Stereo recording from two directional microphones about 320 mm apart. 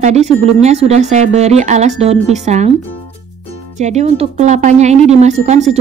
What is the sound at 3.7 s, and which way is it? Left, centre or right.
Speech, right.